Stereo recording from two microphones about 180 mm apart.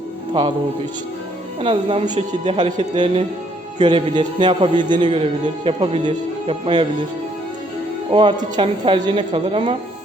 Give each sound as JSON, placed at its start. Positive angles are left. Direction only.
{"t": 1.6, "sound": "a man's voice", "side_deg": -30}
{"t": 8.1, "sound": "a man's voice", "side_deg": -25}